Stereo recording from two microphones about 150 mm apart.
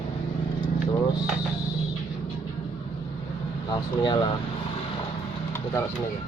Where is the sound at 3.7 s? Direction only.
30° left (ahead or behind).